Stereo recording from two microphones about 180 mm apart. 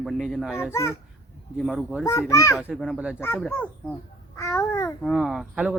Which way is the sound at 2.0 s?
15° left (ahead or behind).